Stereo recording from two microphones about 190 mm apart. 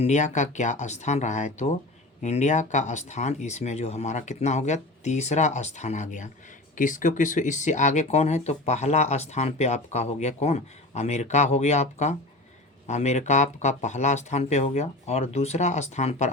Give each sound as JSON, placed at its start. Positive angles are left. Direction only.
{"t": 0.0, "sound": "speech", "side_deg": 40}